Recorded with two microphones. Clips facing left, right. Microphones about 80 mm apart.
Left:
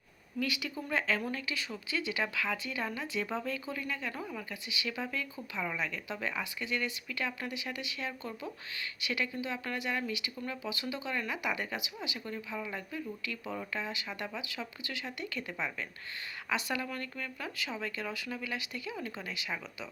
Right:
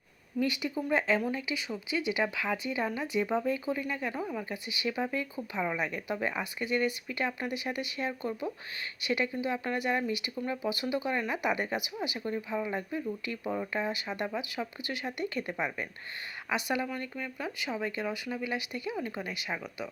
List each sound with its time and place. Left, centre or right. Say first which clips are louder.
0.3 s speech: right 5 dB; right